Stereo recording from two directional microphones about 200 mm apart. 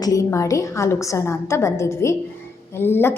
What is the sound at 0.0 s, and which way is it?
A woman's voice, 15° left (ahead or behind).